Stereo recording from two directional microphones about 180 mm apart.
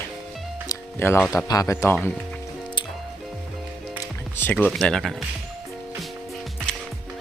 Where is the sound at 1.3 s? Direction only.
20° left (ahead or behind).